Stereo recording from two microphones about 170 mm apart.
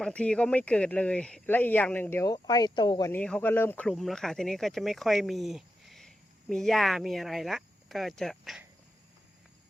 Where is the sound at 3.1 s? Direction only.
5° left (ahead or behind).